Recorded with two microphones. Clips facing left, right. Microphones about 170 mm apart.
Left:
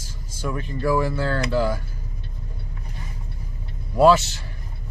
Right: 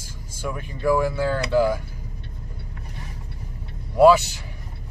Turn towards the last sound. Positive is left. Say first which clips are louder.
# right 1 dB
turn(degrees=-10)  # may be behind; listen again after turning